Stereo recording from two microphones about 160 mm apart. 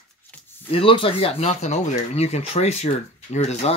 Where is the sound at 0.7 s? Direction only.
35° left (ahead or behind).